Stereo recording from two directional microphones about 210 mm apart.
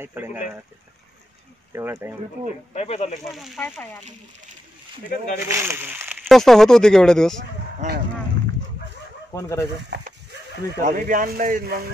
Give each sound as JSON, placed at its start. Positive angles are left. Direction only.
{"t": 0.0, "sound": "speech", "side_deg": -10}
{"t": 1.7, "sound": "speech", "side_deg": -15}
{"t": 2.7, "sound": "speech", "side_deg": 30}
{"t": 3.3, "sound": "speech", "side_deg": 0}
{"t": 5.4, "sound": "speech", "side_deg": -10}
{"t": 6.2, "sound": "speech", "side_deg": 0}
{"t": 7.8, "sound": "speech", "side_deg": -35}
{"t": 9.3, "sound": "speech", "side_deg": 10}
{"t": 9.8, "sound": "speech", "side_deg": -55}